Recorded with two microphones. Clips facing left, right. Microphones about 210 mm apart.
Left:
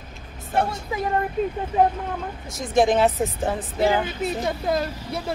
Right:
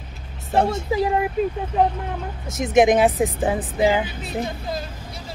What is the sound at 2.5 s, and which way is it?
Speech, 20° right (ahead or behind).